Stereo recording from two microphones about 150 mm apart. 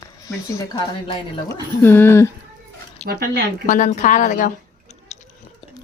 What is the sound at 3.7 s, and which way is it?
Speech, 60° left (ahead or behind).